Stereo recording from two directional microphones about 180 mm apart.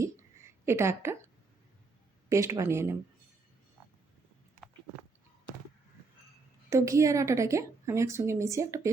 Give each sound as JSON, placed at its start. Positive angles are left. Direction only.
{"t": 0.0, "sound": "a sound", "side_deg": -15}
{"t": 2.3, "sound": "speech", "side_deg": -15}
{"t": 6.7, "sound": "speech", "side_deg": -15}